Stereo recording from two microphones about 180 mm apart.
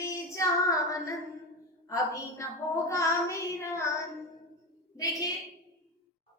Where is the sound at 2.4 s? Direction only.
15° left (ahead or behind).